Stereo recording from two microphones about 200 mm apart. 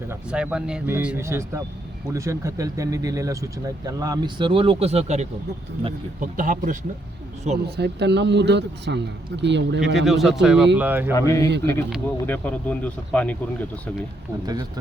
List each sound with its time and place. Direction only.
0.1 s a man's voice: 5° right (ahead or behind); by 7.6 s 35° right (ahead or behind)
7.8 s speech: 55° right (ahead or behind)
10.1 s speech: centre (ahead or behind)
11.1 s speech: 15° left (ahead or behind)